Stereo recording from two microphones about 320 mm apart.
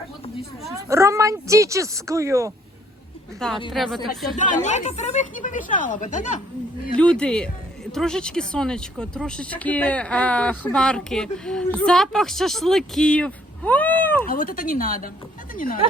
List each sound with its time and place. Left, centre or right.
0.6 s a woman's voice: centre
3.7 s speech: centre
4.3 s a woman's voice: left
6.9 s speech: centre
14.3 s a woman's voice: left